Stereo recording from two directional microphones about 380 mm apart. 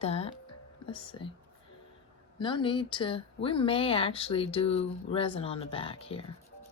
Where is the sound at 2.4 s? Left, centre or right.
Centre.